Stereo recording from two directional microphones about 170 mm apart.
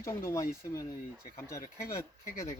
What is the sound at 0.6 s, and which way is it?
Speech, 20° left (ahead or behind).